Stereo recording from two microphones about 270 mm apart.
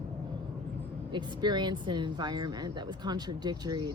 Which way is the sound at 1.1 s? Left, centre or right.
Centre.